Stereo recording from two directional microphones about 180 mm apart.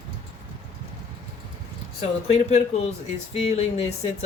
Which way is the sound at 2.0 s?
40° left (ahead or behind).